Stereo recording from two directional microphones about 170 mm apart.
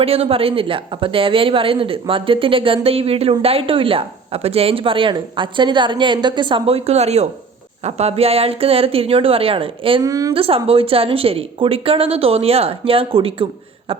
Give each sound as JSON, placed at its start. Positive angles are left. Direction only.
{"t": 0.0, "sound": "a woman's voice", "side_deg": -35}
{"t": 10.0, "sound": "a woman's voice", "side_deg": -20}
{"t": 10.3, "sound": "a woman's voice", "side_deg": -35}